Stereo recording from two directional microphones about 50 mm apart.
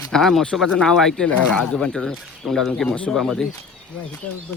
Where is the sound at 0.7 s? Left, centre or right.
Centre.